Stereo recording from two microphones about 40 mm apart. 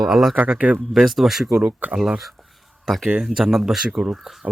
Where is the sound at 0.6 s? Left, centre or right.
Right.